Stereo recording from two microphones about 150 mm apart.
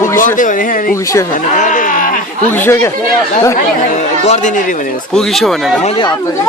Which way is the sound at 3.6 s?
50° left (ahead or behind).